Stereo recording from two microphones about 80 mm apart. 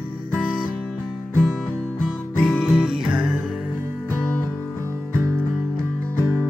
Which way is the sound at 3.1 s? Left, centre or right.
Centre.